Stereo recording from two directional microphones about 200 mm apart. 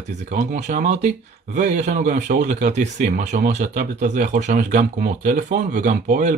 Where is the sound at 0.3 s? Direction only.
40° right (ahead or behind).